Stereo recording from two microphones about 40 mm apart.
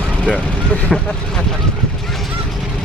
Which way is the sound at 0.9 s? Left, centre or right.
Centre.